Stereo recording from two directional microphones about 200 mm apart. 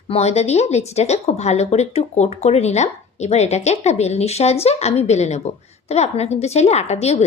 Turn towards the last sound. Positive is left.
turn(degrees=30)  # may be behind; listen again after turning